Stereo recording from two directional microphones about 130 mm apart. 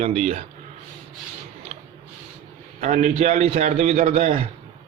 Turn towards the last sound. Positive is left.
turn(degrees=-65)  # may be behind; listen again after turning